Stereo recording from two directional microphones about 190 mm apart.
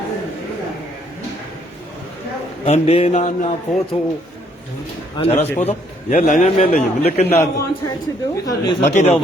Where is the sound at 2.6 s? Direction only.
30° left (ahead or behind).